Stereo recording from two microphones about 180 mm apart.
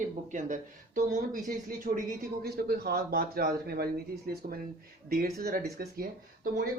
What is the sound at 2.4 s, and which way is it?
Speech, 60° right (ahead or behind).